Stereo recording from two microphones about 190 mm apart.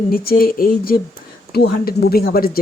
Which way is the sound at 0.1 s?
50° left (ahead or behind).